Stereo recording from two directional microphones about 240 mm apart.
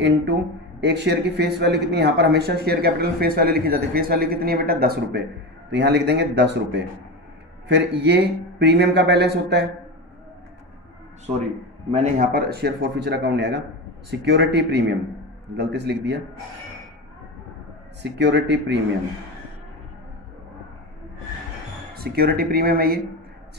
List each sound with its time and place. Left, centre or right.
0.8 s a man's voice: right
11.9 s a man's voice: right
12.3 s a man's voice: right
18.0 s a man's voice: right
21.9 s speech: right